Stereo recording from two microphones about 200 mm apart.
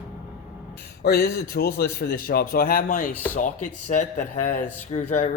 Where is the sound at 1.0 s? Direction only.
50° left (ahead or behind).